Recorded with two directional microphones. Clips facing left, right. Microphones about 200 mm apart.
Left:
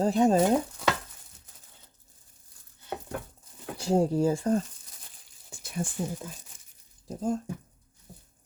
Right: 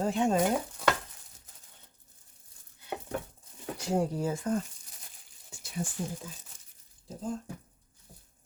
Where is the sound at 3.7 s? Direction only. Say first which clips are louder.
Left 6 dB; 30° left (ahead or behind).